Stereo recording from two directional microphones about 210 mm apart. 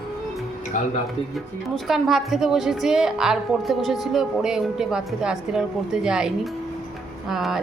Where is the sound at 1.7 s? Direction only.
Centre (ahead or behind).